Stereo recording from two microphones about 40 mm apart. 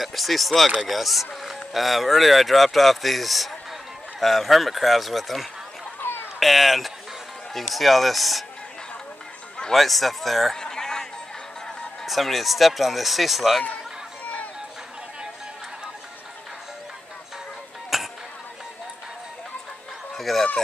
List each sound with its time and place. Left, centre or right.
0.0 s speech: centre
6.0 s a sound: left
6.4 s speech: centre
9.8 s speech: centre
10.5 s a sound: centre
12.1 s speech: centre
14.2 s a sound: left
17.9 s music: centre
20.2 s chicken: centre